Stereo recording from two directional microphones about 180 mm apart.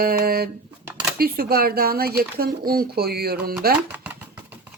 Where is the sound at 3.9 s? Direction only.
10° right (ahead or behind).